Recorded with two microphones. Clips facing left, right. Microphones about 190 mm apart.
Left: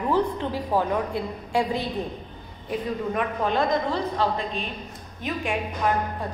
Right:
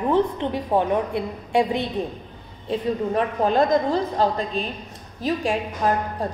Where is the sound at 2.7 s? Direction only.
35° right (ahead or behind).